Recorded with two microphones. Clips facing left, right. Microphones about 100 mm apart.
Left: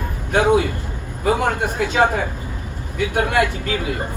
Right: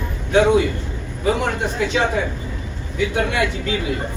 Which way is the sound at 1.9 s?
45° left (ahead or behind).